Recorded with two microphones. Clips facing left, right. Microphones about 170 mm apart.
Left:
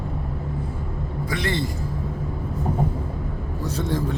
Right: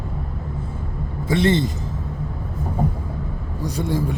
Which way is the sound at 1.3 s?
25° right (ahead or behind).